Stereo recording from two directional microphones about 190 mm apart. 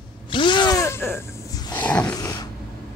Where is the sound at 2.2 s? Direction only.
20° left (ahead or behind).